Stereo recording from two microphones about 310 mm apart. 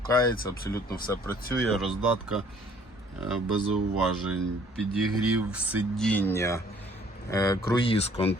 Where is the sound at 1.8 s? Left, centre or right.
Centre.